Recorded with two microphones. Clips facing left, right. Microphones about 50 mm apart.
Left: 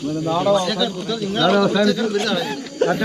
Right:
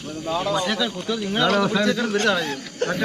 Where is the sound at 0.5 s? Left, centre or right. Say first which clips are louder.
Left 3 dB; centre.